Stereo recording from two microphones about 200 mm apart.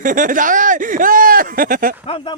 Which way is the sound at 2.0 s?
25° left (ahead or behind).